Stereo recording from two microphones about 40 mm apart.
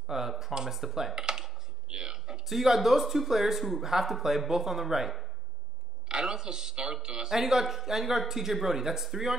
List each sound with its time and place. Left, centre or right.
0.0 s a sound: centre
0.7 s speech: centre
1.1 s speech: centre
6.0 s speech: centre
7.3 s speech: centre